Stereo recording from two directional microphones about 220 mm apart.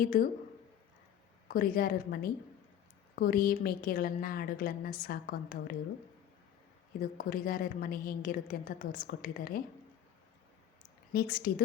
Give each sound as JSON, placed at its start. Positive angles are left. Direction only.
{"t": 0.0, "sound": "a woman's voice", "side_deg": 40}
{"t": 1.5, "sound": "a woman's voice", "side_deg": 40}
{"t": 7.0, "sound": "a woman's voice", "side_deg": 40}
{"t": 11.1, "sound": "a woman's voice", "side_deg": 45}